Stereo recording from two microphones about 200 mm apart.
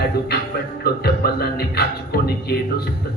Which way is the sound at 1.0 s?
50° left (ahead or behind).